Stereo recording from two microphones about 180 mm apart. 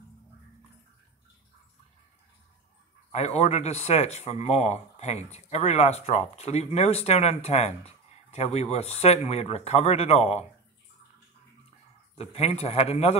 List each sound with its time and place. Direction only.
3.1 s speech: 35° left (ahead or behind)
12.2 s speech: 35° left (ahead or behind)